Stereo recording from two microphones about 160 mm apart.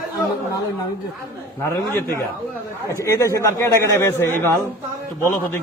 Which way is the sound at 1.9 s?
15° left (ahead or behind).